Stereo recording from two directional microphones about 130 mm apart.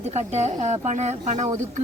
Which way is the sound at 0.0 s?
60° right (ahead or behind).